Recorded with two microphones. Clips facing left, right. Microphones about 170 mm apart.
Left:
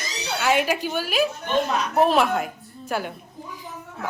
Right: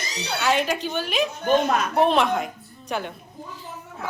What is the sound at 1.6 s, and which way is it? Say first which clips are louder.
Speech: right 2 dB; 50° right (ahead or behind).